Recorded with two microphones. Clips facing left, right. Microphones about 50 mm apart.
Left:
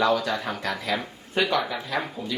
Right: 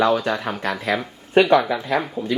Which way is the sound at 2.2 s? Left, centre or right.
Right.